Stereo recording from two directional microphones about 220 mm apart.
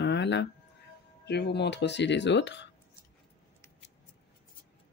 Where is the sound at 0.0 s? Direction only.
55° left (ahead or behind).